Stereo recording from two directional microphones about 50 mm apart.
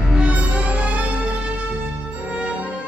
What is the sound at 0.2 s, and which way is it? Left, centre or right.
Music, right.